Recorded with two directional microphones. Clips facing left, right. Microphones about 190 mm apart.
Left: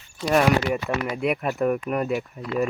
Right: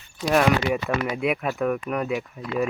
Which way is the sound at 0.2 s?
Centre (ahead or behind).